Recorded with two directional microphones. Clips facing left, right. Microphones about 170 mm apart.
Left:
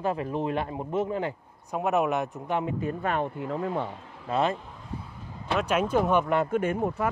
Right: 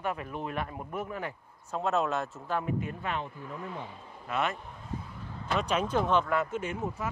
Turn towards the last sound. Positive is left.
turn(degrees=65)  # may be behind; listen again after turning